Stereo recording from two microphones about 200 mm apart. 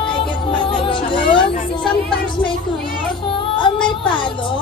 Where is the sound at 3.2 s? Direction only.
25° left (ahead or behind).